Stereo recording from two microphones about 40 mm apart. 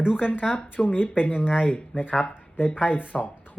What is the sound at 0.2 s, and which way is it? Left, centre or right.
Speech, left.